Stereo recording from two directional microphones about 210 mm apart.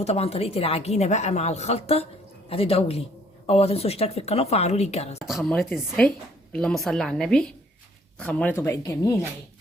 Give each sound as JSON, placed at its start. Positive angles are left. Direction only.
{"t": 0.0, "sound": "a woman's voice", "side_deg": 30}
{"t": 5.2, "sound": "a woman's voice", "side_deg": 0}